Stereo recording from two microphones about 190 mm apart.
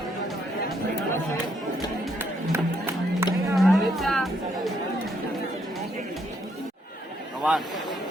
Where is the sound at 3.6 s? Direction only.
Centre (ahead or behind).